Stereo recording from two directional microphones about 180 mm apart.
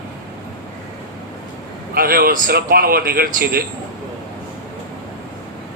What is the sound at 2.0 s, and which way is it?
A man's voice, 55° right (ahead or behind).